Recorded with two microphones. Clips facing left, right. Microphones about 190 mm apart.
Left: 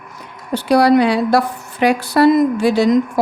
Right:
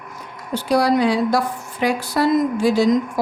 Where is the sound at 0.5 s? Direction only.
65° left (ahead or behind).